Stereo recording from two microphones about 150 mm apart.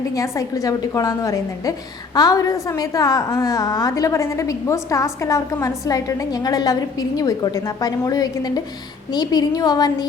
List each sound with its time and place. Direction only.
0.1 s a woman's voice: 20° left (ahead or behind)